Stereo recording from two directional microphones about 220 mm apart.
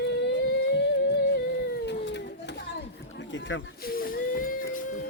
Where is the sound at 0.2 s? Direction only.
50° left (ahead or behind).